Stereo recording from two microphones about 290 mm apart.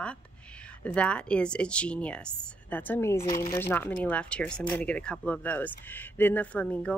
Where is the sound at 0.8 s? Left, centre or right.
Centre.